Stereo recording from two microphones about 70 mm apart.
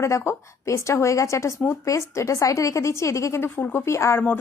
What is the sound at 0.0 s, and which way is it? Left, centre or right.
Speech, left.